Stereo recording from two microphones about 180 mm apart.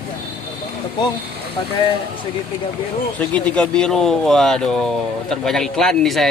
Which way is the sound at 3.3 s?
5° left (ahead or behind).